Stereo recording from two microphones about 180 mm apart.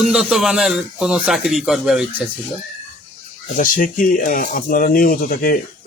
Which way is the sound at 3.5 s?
50° left (ahead or behind).